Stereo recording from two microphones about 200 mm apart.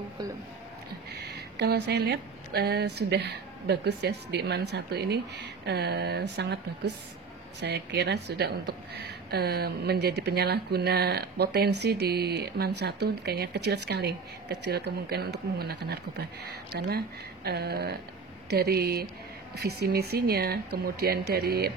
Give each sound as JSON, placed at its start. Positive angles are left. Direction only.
{"t": 1.1, "sound": "speech", "side_deg": -55}
{"t": 7.6, "sound": "a woman's voice", "side_deg": -55}